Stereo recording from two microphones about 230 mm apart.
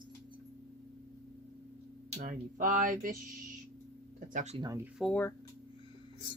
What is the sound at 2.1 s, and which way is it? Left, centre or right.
Speech, right.